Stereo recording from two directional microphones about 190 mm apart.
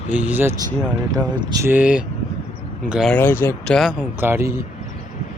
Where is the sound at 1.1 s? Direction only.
20° right (ahead or behind).